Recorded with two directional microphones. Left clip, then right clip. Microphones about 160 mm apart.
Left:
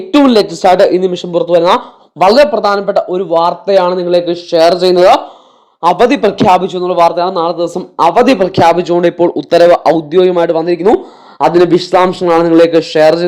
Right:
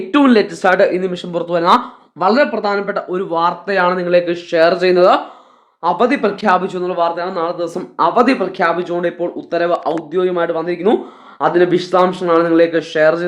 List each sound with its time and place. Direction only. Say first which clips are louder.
0.1 s speech: left 4 dB; 25° left (ahead or behind)
5.8 s a man's voice: left 6 dB; 40° left (ahead or behind)
8.4 s speech: left 8 dB; 50° left (ahead or behind)
10.1 s a man's voice: left 7 dB; 45° left (ahead or behind)